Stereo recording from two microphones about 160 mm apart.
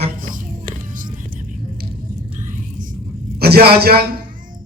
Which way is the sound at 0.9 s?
55° right (ahead or behind).